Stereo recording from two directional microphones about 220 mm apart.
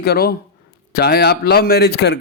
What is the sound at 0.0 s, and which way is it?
Speech, 45° left (ahead or behind).